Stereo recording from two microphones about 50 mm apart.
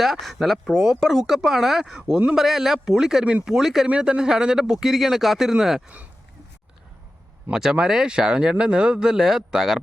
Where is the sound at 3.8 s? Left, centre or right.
Right.